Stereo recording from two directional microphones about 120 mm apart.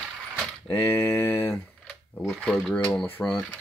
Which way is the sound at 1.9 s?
5° left (ahead or behind).